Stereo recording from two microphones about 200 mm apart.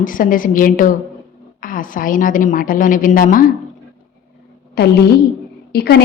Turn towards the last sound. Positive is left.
turn(degrees=55)  # may be behind; listen again after turning